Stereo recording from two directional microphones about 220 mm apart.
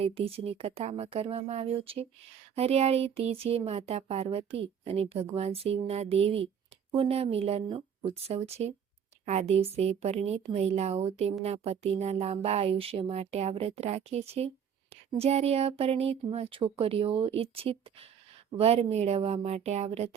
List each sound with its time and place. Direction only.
0.0 s speech: 25° right (ahead or behind)